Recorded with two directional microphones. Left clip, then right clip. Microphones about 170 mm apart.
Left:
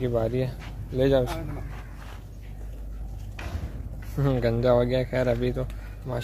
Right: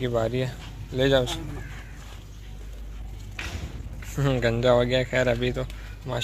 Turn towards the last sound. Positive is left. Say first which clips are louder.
# right 2 dB
turn(degrees=0)  # may be behind; listen again after turning